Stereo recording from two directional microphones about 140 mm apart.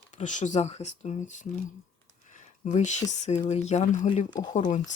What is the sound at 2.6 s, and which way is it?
Speech, 55° left (ahead or behind).